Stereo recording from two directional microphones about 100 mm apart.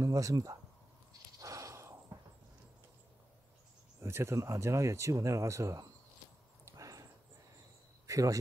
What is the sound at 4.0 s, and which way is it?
Speech, 25° right (ahead or behind).